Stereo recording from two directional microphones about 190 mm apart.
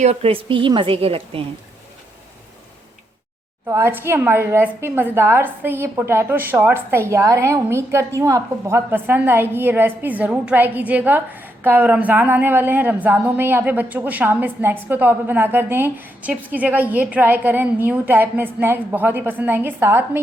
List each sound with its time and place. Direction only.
0.0 s a woman's voice: 35° right (ahead or behind)
3.7 s a woman's voice: 15° right (ahead or behind)